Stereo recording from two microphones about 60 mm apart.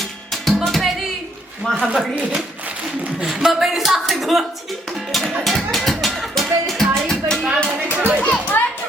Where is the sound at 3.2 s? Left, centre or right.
Centre.